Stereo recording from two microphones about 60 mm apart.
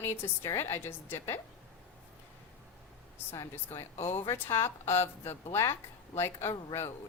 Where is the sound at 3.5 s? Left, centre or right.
Left.